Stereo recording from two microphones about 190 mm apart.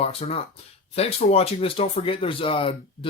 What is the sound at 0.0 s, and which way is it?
Speech, 30° left (ahead or behind).